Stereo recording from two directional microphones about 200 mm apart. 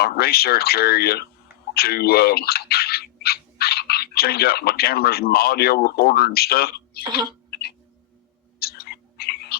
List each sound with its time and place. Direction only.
0.0 s speech: 50° left (ahead or behind)
7.0 s cough: 20° right (ahead or behind)
7.5 s music: 50° left (ahead or behind)
8.5 s whispering: 50° left (ahead or behind)